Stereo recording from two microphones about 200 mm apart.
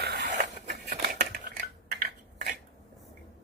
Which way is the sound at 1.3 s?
50° right (ahead or behind).